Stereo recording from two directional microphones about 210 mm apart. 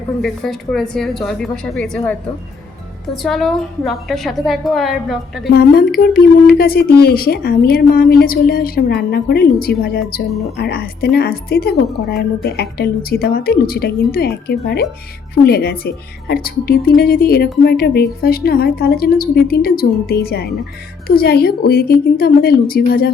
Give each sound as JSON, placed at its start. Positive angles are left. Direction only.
{"t": 0.2, "sound": "a woman's voice", "side_deg": 0}
{"t": 5.5, "sound": "speech", "side_deg": 45}